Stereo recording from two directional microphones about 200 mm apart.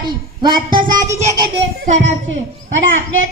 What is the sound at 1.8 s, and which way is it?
Speech, 35° right (ahead or behind).